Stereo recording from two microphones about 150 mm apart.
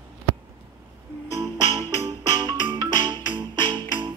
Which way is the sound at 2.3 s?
30° right (ahead or behind).